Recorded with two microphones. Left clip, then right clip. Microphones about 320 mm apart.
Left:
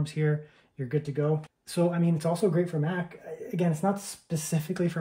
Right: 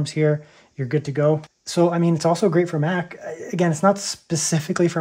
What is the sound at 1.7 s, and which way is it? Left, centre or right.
Speech, centre.